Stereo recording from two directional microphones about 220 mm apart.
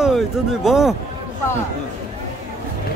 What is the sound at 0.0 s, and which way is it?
Speech, centre (ahead or behind).